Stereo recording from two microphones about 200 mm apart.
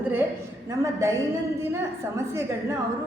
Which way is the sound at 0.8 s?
15° right (ahead or behind).